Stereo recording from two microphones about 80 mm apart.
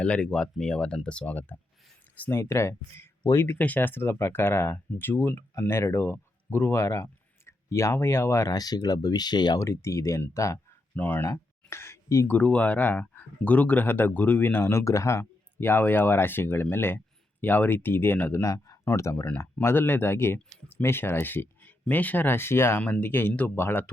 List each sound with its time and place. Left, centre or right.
0.0 s speech: centre
2.3 s speech: left
8.5 s speech: left
9.6 s speech: left
10.9 s speech: left
11.7 s a sound: left
12.3 s speech: centre
18.4 s speech: left
19.6 s speech: left